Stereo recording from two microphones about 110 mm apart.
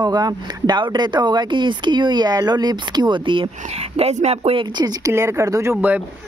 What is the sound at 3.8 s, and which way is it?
Speech, 75° right (ahead or behind).